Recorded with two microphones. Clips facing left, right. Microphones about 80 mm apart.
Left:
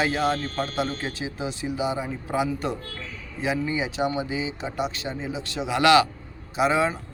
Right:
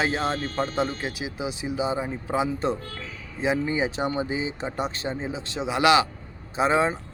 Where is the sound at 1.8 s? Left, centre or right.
Right.